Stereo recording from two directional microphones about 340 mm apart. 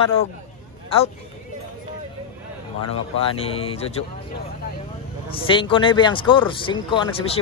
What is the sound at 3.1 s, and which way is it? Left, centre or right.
Speech, centre.